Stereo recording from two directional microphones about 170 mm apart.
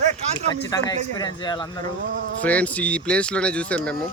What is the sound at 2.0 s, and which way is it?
Speech, 70° right (ahead or behind).